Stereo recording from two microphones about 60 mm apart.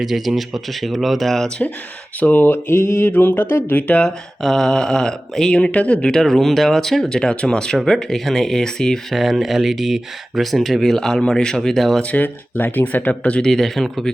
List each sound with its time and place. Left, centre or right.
0.0 s speech: centre
2.2 s mantra: left
3.1 s speech: left
4.0 s speech: centre
9.1 s speech: centre
12.1 s speech: left
13.4 s speech: centre